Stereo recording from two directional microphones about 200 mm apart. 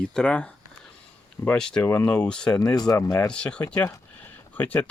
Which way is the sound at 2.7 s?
20° left (ahead or behind).